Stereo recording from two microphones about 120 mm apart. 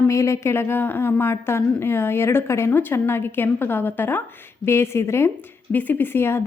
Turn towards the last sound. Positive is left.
turn(degrees=20)  # may be behind; listen again after turning